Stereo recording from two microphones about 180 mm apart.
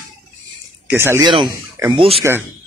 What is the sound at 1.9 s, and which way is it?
Speech, 30° right (ahead or behind).